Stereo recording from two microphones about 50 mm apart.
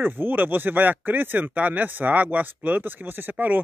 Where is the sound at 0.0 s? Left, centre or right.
Right.